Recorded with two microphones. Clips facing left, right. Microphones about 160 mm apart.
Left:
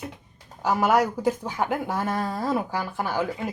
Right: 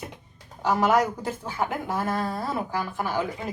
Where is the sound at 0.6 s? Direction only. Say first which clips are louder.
Even; 5° left (ahead or behind).